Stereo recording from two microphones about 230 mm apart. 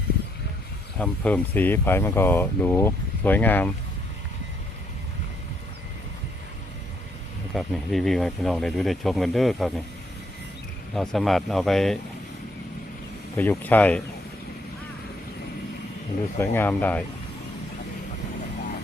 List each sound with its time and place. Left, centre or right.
0.9 s speech: centre
7.5 s speech: centre
10.9 s speech: centre
13.3 s speech: centre
16.4 s speech: centre